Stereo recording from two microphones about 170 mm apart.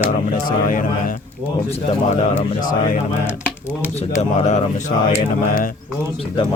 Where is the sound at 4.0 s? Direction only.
40° left (ahead or behind).